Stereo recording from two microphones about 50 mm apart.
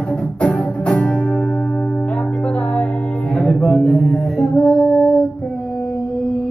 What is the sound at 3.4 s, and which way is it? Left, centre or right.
Mantra, centre.